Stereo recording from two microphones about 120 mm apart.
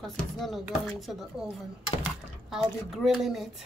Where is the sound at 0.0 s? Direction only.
Centre (ahead or behind).